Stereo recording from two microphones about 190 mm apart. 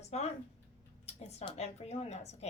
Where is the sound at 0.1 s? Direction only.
35° left (ahead or behind).